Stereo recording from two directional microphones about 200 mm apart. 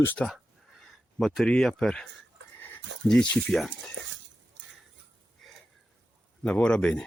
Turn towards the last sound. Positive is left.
turn(degrees=5)  # may be behind; listen again after turning